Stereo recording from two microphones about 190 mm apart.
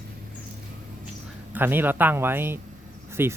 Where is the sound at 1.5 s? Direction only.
10° right (ahead or behind).